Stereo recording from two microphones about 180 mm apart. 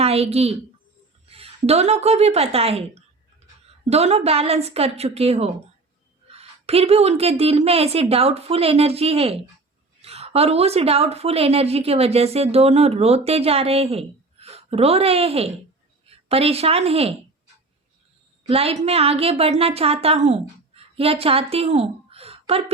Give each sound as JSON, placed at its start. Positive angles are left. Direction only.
{"t": 0.0, "sound": "a woman's voice", "side_deg": -35}
{"t": 18.4, "sound": "a woman's voice", "side_deg": -35}